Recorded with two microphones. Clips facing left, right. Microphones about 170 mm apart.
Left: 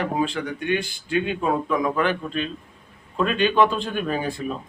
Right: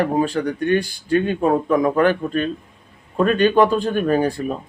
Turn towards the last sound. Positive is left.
turn(degrees=-45)  # may be behind; listen again after turning